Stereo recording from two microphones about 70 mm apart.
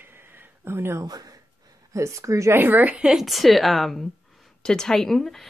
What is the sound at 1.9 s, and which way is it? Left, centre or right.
Speech, right.